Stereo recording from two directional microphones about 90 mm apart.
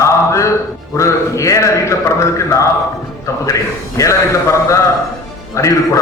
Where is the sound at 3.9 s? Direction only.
35° left (ahead or behind).